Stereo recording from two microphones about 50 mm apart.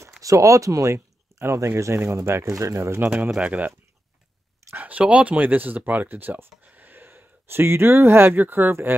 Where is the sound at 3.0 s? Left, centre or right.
Right.